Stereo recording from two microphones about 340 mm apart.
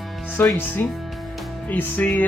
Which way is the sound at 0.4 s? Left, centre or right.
Centre.